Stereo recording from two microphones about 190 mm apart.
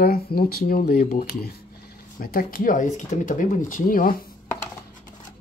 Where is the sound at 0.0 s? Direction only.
55° left (ahead or behind).